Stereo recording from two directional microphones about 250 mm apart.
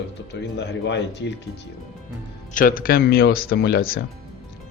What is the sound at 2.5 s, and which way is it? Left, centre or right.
Speech, left.